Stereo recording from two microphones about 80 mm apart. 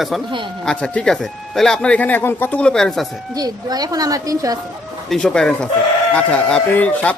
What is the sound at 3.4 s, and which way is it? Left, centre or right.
A woman's voice, right.